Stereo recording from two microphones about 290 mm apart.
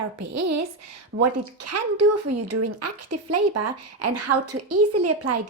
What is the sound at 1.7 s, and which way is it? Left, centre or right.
Speech, right.